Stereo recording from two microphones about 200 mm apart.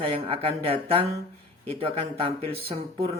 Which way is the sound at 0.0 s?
30° right (ahead or behind).